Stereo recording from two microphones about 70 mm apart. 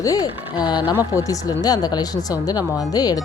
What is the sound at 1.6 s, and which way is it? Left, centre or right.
Speech, left.